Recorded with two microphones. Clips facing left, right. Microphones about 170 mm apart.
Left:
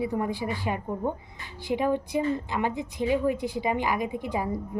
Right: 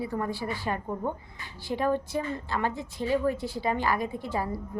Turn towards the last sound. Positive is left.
turn(degrees=15)  # may be behind; listen again after turning